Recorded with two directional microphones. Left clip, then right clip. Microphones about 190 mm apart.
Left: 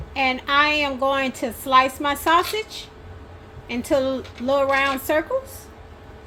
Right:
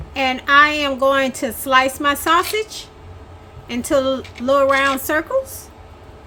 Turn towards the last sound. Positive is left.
turn(degrees=-25)  # may be behind; listen again after turning